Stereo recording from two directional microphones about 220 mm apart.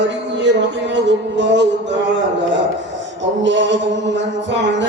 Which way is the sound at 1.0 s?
55° right (ahead or behind).